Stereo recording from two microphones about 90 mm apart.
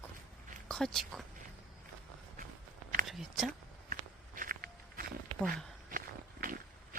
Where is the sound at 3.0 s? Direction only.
Centre (ahead or behind).